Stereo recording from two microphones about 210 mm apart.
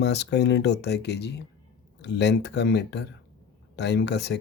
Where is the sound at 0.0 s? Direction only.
55° left (ahead or behind).